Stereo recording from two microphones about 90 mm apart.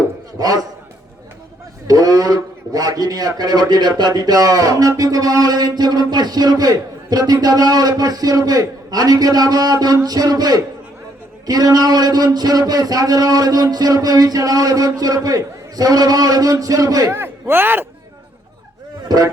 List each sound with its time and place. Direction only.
0.3 s a man's voice: 45° right (ahead or behind)
1.9 s a man's voice: 45° right (ahead or behind)
17.1 s speech: 25° right (ahead or behind)
19.0 s a sound: 45° right (ahead or behind)